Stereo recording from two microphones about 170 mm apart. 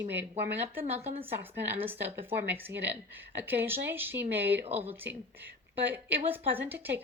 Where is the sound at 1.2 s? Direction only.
10° right (ahead or behind).